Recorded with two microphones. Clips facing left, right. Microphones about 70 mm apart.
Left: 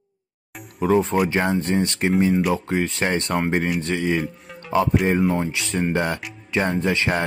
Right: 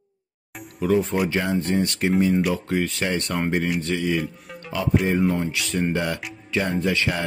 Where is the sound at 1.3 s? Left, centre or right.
Left.